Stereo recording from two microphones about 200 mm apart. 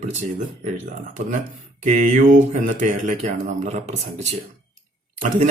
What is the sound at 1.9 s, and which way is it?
Speech, 35° right (ahead or behind).